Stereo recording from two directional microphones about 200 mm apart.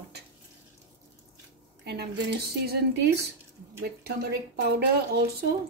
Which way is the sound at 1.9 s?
55° right (ahead or behind).